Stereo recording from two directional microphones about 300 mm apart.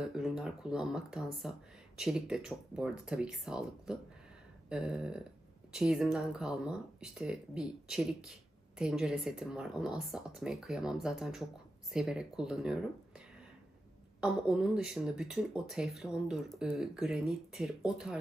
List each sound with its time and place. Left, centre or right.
0.0 s speech: centre
14.2 s speech: centre